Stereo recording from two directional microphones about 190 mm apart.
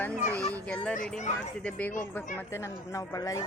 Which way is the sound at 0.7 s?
5° left (ahead or behind).